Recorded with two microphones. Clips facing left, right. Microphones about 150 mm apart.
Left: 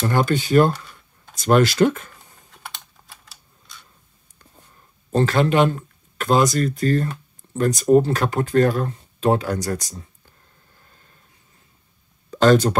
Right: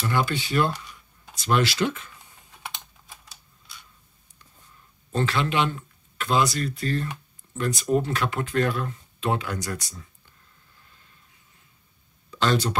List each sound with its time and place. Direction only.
0.0 s speech: 45° left (ahead or behind)
3.0 s typing: 50° left (ahead or behind)
4.4 s a sound: 40° left (ahead or behind)
7.5 s speech: 40° left (ahead or behind)
10.8 s a sound: 45° left (ahead or behind)
12.3 s speech: 45° left (ahead or behind)